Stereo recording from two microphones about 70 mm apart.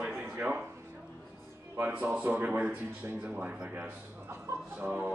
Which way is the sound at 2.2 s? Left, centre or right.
Right.